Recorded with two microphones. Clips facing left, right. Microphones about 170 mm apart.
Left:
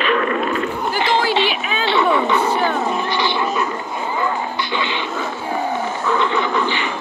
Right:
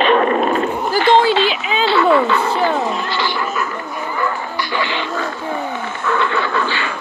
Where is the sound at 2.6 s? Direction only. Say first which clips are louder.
Right 1 dB; 20° left (ahead or behind).